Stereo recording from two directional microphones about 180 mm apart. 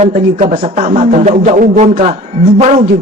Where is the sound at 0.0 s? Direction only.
40° right (ahead or behind).